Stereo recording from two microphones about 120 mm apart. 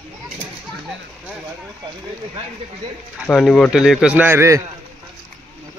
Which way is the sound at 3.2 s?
Centre (ahead or behind).